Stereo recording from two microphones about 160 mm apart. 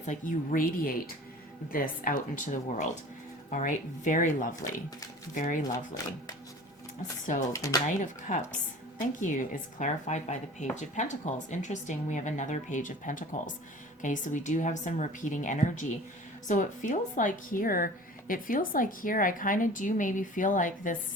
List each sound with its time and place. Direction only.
0.0 s a woman's voice: 55° left (ahead or behind)
7.5 s speech: 20° left (ahead or behind)
7.9 s a woman's voice: 50° left (ahead or behind)